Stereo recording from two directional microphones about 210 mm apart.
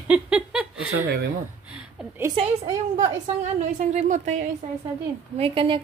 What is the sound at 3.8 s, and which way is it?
A woman's voice, 35° right (ahead or behind).